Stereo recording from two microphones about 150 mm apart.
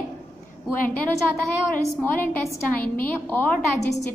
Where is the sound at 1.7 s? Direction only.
10° left (ahead or behind).